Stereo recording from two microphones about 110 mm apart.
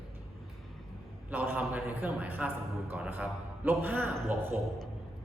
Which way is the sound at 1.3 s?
15° right (ahead or behind).